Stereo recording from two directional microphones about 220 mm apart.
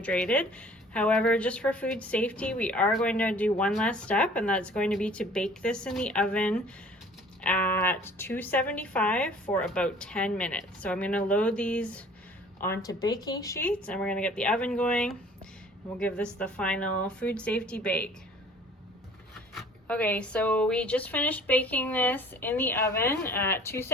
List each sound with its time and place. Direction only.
0.0 s a woman's voice: 5° left (ahead or behind)
19.5 s speech: 5° left (ahead or behind)